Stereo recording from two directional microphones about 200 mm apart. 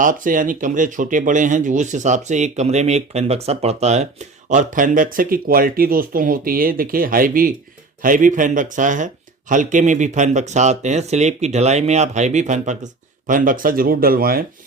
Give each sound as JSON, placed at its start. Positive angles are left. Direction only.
{"t": 0.0, "sound": "speech", "side_deg": -40}